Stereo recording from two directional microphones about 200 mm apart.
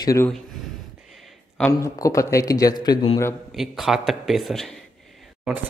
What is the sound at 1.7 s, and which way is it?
Speech, 15° left (ahead or behind).